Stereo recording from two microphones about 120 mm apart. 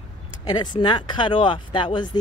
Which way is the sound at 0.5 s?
40° left (ahead or behind).